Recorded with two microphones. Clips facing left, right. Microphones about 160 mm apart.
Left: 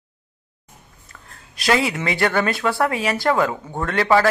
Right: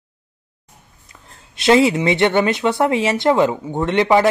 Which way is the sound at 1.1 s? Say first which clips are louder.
Even; 25° right (ahead or behind).